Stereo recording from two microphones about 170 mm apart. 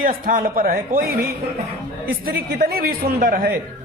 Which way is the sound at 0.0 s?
55° right (ahead or behind).